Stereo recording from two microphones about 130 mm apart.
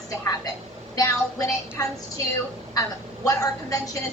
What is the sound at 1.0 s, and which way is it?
Speech, 25° left (ahead or behind).